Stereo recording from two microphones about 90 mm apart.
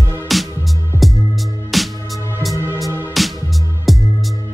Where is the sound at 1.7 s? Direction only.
Centre (ahead or behind).